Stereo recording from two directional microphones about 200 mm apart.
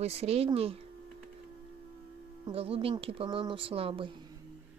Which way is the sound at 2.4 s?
30° right (ahead or behind).